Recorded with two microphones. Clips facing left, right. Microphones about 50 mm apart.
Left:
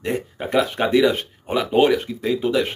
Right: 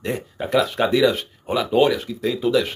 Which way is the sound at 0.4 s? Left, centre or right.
Left.